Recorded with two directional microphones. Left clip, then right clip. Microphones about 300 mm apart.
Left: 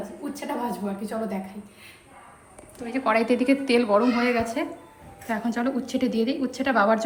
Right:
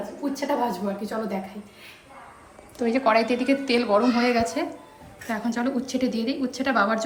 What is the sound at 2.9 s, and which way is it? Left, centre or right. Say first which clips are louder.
A woman's voice: right 1 dB; centre.